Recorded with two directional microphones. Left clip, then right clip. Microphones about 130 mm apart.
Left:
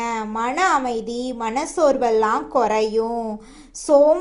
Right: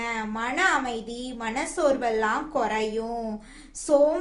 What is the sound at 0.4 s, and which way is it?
A woman's voice, 35° left (ahead or behind).